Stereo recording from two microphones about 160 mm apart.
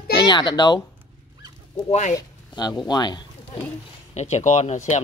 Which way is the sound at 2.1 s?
25° left (ahead or behind).